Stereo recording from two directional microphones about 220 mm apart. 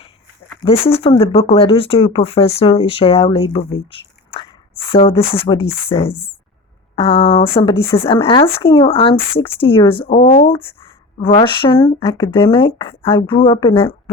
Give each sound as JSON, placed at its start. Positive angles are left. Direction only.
{"t": 0.6, "sound": "speech", "side_deg": 25}
{"t": 4.3, "sound": "a sound", "side_deg": 25}
{"t": 5.9, "sound": "speech", "side_deg": 20}